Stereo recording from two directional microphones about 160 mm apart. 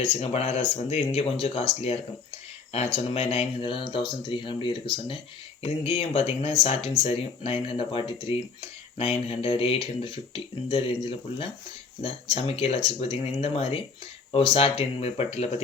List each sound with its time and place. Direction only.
0.0 s speech: 35° left (ahead or behind)